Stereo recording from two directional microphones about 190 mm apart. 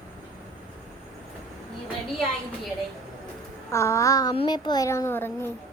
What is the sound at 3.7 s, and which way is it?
A child's voice, 15° left (ahead or behind).